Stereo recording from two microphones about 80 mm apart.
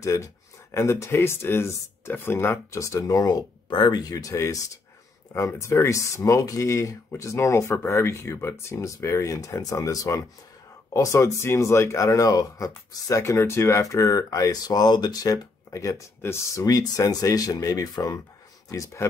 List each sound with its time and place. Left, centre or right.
0.0 s speech: left
3.7 s speech: left
4.2 s speech: left
16.2 s speech: left
16.6 s speech: left